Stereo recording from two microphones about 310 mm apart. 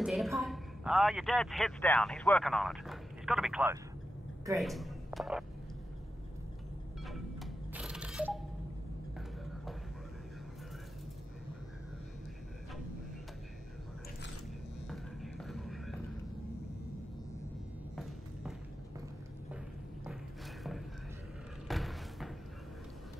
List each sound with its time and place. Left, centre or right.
0.0 s a woman's voice: centre
7.1 s mechanisms: centre
14.9 s music: centre
21.6 s a sound: centre